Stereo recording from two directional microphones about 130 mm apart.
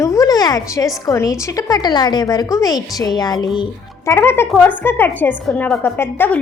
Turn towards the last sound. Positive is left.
turn(degrees=15)  # may be behind; listen again after turning